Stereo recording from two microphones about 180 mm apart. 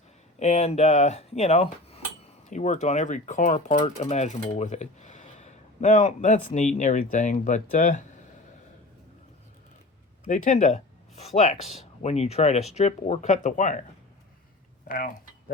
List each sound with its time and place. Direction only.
0.3 s speech: 35° left (ahead or behind)
10.2 s speech: 45° left (ahead or behind)
14.8 s typing: 50° left (ahead or behind)